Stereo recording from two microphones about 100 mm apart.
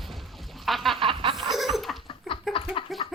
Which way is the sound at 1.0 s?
60° right (ahead or behind).